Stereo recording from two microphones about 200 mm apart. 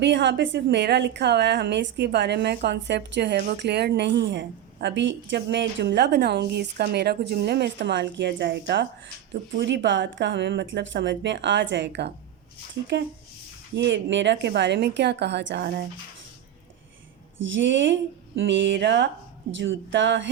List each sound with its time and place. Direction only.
0.0 s a woman's voice: 60° right (ahead or behind)
13.7 s a woman's voice: 65° right (ahead or behind)
17.3 s a woman's voice: 70° right (ahead or behind)